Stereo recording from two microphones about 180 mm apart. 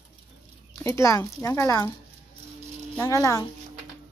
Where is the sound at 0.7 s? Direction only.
15° left (ahead or behind).